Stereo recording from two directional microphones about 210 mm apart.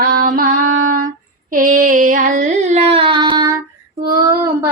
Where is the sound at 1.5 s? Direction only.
40° right (ahead or behind); by 3.5 s 20° right (ahead or behind).